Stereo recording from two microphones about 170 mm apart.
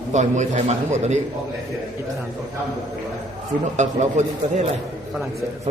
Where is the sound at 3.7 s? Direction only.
45° right (ahead or behind).